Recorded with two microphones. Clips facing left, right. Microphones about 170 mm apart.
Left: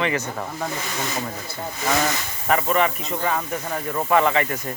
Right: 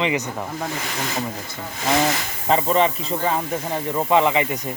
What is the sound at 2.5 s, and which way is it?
Speech, 25° right (ahead or behind).